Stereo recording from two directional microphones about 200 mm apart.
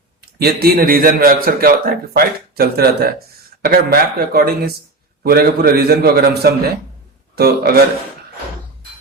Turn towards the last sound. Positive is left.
turn(degrees=-50)  # may be behind; listen again after turning